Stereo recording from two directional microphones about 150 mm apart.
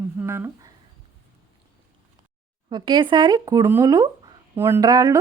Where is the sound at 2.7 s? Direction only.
30° right (ahead or behind).